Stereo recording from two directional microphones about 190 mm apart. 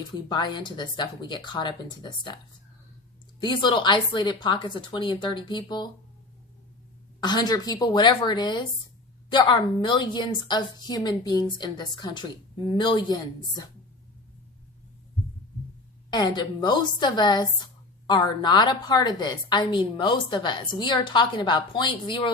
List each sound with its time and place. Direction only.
0.3 s a woman's voice: 25° left (ahead or behind)
3.4 s a woman's voice: 25° left (ahead or behind)
7.2 s a woman's voice: 20° left (ahead or behind)
16.0 s a woman's voice: 20° left (ahead or behind)